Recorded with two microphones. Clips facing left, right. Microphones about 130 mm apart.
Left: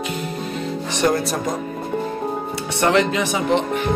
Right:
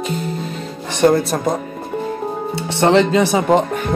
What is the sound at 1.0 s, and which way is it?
Speech, 35° right (ahead or behind).